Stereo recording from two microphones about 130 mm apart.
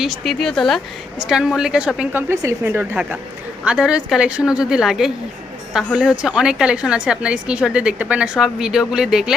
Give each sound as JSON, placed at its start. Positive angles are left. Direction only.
{"t": 0.0, "sound": "speech", "side_deg": 0}
{"t": 2.3, "sound": "a woman's voice", "side_deg": -20}